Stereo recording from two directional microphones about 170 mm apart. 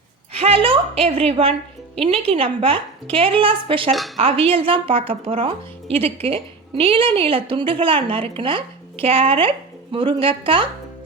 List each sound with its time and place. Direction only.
0.3 s a woman's voice: 35° right (ahead or behind)